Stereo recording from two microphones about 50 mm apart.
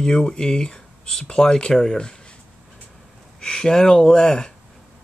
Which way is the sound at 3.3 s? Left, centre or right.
Centre.